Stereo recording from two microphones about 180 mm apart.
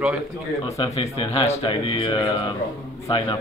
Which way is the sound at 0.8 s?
30° left (ahead or behind).